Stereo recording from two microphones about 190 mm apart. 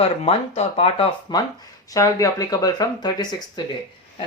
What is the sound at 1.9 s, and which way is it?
Speech, 15° left (ahead or behind).